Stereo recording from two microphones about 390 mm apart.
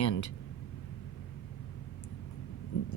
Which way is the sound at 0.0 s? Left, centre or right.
Left.